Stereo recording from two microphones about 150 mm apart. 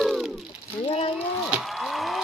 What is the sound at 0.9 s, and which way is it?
Speech, 40° left (ahead or behind).